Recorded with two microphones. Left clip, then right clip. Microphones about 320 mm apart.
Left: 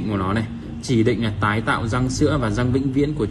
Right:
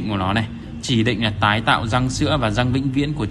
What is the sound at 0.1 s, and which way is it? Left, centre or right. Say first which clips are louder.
A man's voice: right 3 dB; centre.